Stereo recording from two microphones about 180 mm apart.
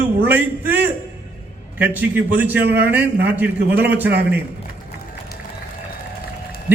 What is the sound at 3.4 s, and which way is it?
Speech, 10° right (ahead or behind).